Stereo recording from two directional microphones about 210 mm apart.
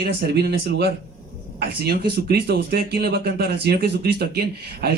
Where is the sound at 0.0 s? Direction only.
50° right (ahead or behind).